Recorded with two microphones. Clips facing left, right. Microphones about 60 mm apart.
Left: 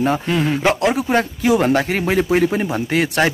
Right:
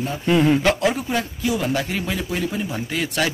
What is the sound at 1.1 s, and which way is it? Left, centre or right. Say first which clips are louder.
Speech: left 7 dB; left.